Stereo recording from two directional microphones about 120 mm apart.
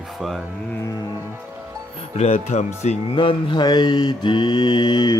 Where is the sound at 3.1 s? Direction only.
45° left (ahead or behind).